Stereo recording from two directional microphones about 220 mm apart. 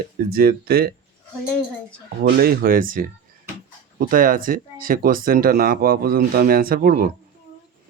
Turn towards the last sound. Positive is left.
turn(degrees=-45)  # may be behind; listen again after turning